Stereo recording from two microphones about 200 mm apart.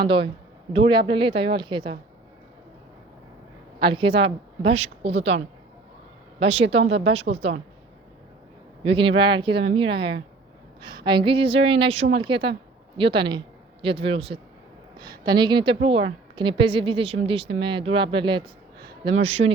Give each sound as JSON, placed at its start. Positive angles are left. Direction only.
{"t": 0.7, "sound": "a woman's voice", "side_deg": -25}
{"t": 3.8, "sound": "a woman's voice", "side_deg": -25}
{"t": 6.4, "sound": "a woman's voice", "side_deg": -30}
{"t": 8.8, "sound": "a woman's voice", "side_deg": -25}